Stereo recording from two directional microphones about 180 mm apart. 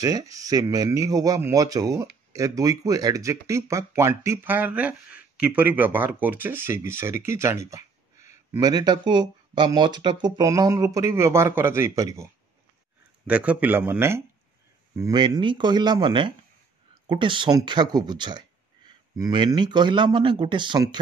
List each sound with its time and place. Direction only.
0.0 s speech: 20° right (ahead or behind)
13.3 s speech: 10° right (ahead or behind); by 21.0 s 25° right (ahead or behind)